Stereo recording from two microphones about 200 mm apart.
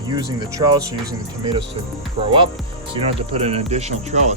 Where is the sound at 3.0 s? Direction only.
30° right (ahead or behind).